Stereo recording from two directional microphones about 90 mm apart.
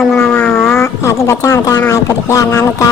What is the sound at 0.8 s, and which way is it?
Speech, 35° left (ahead or behind).